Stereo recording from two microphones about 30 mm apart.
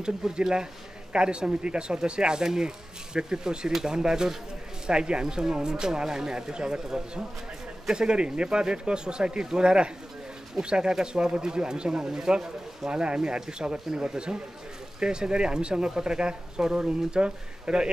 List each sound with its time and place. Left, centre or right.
0.3 s speech: right